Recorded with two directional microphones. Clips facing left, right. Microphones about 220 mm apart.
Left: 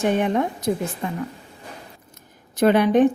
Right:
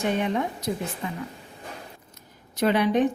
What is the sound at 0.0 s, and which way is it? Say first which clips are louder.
A woman's voice: left 5 dB; 50° left (ahead or behind).